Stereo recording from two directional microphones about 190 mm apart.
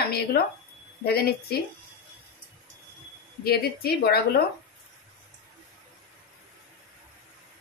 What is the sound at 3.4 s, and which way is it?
Speech, 55° left (ahead or behind).